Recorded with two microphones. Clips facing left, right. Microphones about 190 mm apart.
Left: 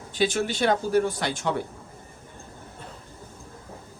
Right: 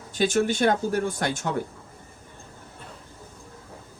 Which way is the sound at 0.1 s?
45° right (ahead or behind).